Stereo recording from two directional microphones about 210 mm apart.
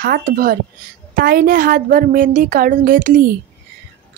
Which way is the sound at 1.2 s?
45° right (ahead or behind).